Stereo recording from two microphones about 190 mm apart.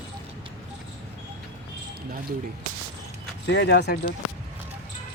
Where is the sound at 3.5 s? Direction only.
60° left (ahead or behind).